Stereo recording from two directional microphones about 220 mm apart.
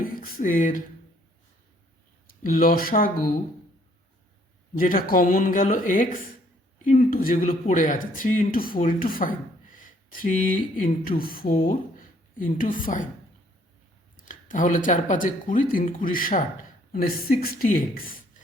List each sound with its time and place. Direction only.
0.0 s a sound: 40° left (ahead or behind)
2.4 s speech: 40° left (ahead or behind)
4.8 s speech: 40° left (ahead or behind)
14.3 s speech: 35° left (ahead or behind)